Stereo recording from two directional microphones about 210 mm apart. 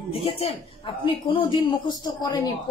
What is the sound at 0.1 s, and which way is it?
A woman's voice, 25° left (ahead or behind).